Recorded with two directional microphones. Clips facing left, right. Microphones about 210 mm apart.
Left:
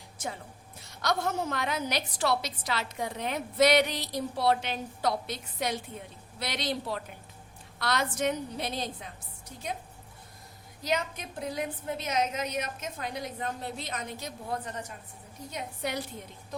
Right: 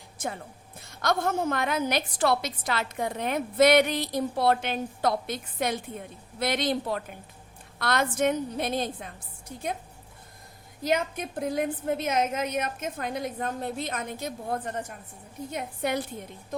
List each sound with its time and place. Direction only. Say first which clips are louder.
0.2 s a woman's voice: right 4 dB; 55° right (ahead or behind)
10.8 s a woman's voice: right 4 dB; 50° right (ahead or behind)